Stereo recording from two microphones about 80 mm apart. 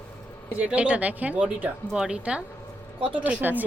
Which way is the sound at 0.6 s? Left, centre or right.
Centre.